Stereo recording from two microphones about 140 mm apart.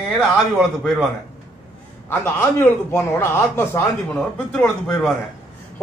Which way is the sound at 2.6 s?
15° left (ahead or behind).